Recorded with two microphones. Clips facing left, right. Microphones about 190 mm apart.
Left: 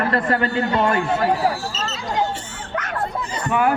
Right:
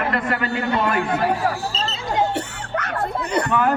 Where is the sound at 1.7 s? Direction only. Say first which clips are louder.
Right 1 dB; 35° right (ahead or behind).